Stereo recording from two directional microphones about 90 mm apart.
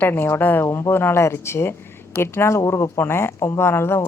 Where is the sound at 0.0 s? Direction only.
25° left (ahead or behind).